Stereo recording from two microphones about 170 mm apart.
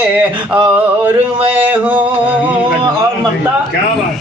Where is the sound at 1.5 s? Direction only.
10° right (ahead or behind).